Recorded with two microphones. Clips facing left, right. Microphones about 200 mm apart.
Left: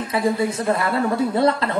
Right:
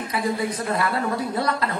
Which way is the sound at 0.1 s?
25° left (ahead or behind).